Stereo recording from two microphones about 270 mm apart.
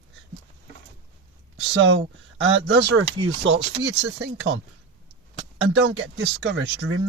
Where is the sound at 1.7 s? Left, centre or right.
Right.